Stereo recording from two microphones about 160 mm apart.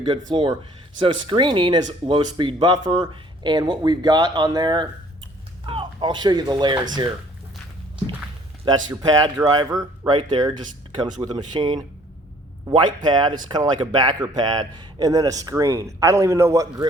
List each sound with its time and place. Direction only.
0.3 s a man's voice: 30° right (ahead or behind)
8.6 s a man's voice: 25° right (ahead or behind)
10.2 s a man's voice: 30° right (ahead or behind)